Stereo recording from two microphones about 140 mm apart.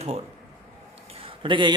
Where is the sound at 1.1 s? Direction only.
40° right (ahead or behind).